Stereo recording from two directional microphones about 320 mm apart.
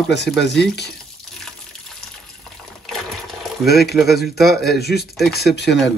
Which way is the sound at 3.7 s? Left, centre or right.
Left.